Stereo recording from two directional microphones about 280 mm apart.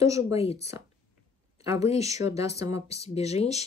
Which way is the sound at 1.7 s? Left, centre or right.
Left.